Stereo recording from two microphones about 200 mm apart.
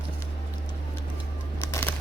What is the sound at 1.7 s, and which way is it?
Crumpling, 10° left (ahead or behind).